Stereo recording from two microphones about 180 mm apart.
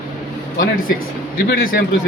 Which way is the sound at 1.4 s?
55° left (ahead or behind).